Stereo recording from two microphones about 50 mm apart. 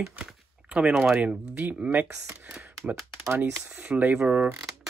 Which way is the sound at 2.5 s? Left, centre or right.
Centre.